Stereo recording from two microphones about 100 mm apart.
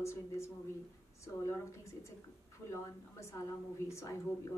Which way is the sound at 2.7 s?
30° left (ahead or behind).